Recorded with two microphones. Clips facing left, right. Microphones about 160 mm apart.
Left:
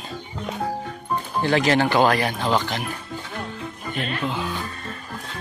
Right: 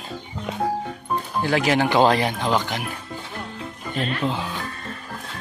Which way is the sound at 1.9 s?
20° right (ahead or behind).